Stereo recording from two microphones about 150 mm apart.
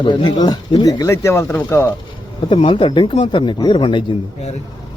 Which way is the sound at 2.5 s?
35° left (ahead or behind).